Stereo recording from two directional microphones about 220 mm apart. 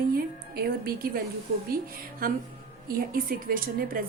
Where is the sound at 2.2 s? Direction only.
40° right (ahead or behind).